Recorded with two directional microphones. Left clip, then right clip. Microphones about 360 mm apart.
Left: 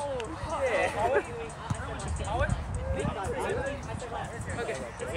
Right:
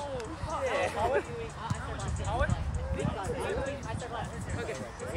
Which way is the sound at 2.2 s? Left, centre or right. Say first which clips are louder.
Left 1 dB; centre.